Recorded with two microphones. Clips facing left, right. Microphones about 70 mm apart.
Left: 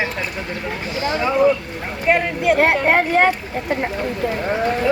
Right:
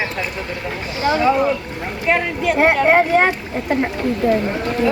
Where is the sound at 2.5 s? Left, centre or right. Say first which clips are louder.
Right 4 dB; centre.